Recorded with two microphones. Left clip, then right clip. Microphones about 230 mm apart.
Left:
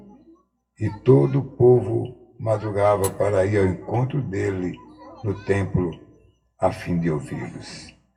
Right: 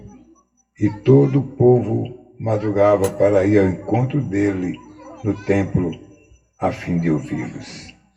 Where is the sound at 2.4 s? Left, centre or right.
Left.